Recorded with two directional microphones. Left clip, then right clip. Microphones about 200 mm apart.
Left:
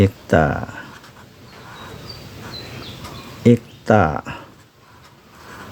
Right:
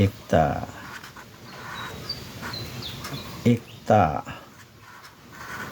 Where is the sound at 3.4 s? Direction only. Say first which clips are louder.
Left 7 dB; 50° left (ahead or behind).